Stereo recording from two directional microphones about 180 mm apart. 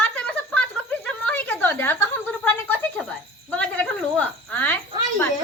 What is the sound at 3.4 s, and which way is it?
Cricket, 5° left (ahead or behind).